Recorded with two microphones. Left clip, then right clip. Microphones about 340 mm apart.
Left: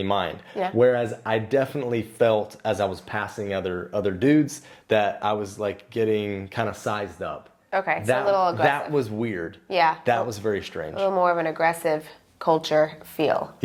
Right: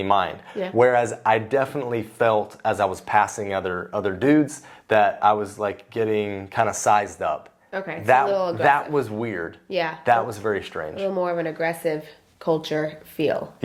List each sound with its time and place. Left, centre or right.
0.0 s speech: right
2.9 s speech: right
7.7 s speech: left
8.3 s speech: left
8.6 s speech: right
9.6 s speech: left
10.3 s speech: right
11.0 s speech: left